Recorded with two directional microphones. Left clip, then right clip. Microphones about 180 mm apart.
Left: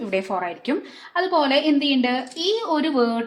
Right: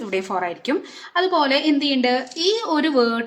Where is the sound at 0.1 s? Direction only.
Centre (ahead or behind).